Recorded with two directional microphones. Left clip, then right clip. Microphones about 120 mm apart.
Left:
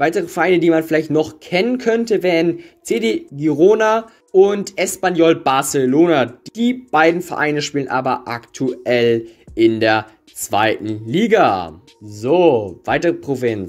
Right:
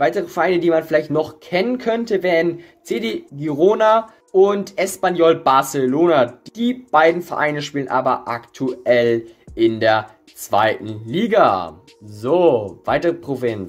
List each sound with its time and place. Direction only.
0.0 s speech: 40° left (ahead or behind)